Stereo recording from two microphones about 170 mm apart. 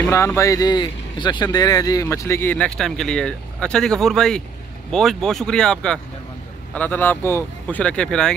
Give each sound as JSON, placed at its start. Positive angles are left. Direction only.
{"t": 0.1, "sound": "speech", "side_deg": 15}